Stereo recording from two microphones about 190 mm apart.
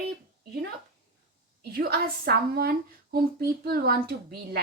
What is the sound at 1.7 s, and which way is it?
A woman's voice, 50° right (ahead or behind).